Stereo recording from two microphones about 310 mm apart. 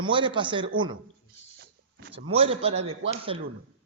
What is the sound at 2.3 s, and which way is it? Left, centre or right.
A man's voice, centre.